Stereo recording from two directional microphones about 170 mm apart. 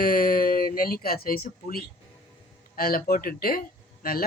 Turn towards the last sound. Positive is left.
turn(degrees=60)  # may be behind; listen again after turning